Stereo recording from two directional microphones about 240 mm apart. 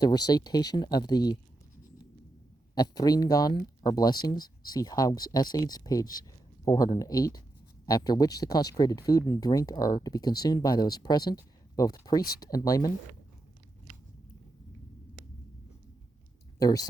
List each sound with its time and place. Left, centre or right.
0.0 s speech: centre
2.7 s speech: centre
16.6 s speech: centre